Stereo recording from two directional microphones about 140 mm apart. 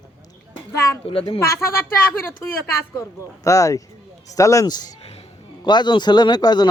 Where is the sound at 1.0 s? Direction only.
40° left (ahead or behind).